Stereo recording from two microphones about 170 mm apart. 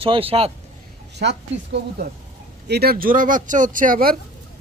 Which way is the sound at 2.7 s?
65° right (ahead or behind).